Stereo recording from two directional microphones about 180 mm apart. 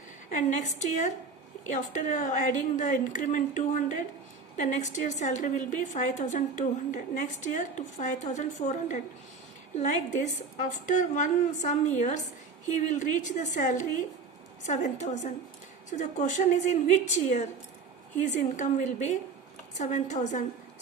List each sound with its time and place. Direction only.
0.3 s a woman's voice: 45° left (ahead or behind)